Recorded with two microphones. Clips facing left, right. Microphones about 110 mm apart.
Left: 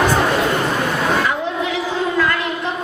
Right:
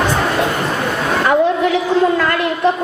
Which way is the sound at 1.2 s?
55° right (ahead or behind).